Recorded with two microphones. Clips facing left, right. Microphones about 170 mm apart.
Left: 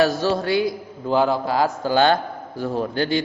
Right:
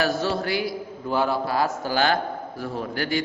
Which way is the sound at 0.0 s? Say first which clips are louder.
Left 5 dB; 25° left (ahead or behind).